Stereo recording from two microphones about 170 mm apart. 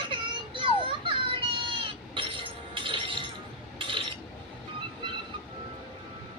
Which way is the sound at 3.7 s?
30° right (ahead or behind).